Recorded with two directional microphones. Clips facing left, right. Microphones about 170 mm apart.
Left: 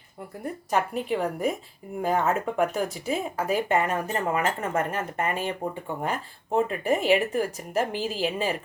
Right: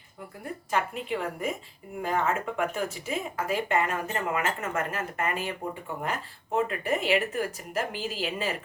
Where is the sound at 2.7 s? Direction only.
35° left (ahead or behind).